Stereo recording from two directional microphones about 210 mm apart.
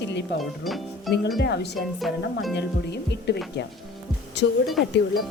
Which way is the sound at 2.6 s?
55° left (ahead or behind).